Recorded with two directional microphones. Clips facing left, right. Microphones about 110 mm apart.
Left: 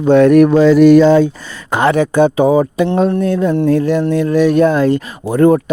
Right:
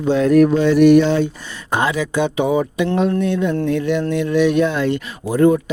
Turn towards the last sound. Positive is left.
turn(degrees=50)  # may be behind; listen again after turning